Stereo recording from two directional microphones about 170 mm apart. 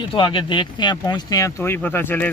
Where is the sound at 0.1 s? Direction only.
30° left (ahead or behind).